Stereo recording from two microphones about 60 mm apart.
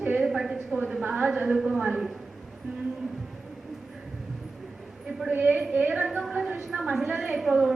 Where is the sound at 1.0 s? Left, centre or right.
Centre.